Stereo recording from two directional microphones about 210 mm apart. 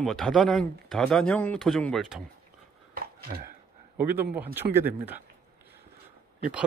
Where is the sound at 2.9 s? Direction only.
45° right (ahead or behind).